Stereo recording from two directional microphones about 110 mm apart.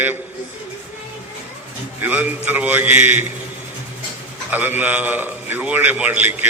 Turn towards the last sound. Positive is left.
turn(degrees=-15)  # may be behind; listen again after turning